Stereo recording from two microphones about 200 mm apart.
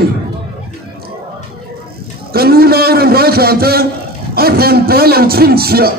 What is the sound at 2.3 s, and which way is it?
A man's voice, 50° right (ahead or behind).